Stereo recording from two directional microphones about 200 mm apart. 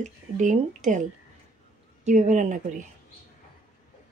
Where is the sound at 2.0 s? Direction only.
35° right (ahead or behind).